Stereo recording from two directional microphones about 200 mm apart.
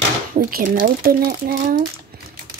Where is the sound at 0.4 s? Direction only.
45° right (ahead or behind).